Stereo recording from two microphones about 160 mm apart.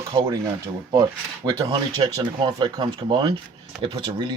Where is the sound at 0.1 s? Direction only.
25° right (ahead or behind).